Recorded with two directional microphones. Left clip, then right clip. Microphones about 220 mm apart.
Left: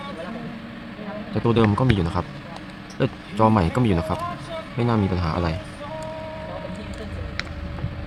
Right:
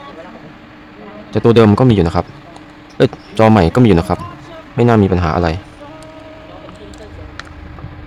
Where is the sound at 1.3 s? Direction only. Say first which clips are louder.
Right 11 dB; 50° right (ahead or behind).